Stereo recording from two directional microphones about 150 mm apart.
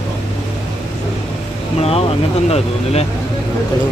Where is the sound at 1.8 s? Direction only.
40° left (ahead or behind).